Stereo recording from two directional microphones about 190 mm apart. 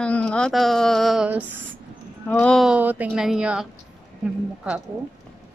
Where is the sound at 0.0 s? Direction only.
5° left (ahead or behind).